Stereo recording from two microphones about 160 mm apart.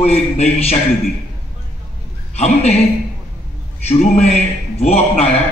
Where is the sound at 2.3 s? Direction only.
40° left (ahead or behind).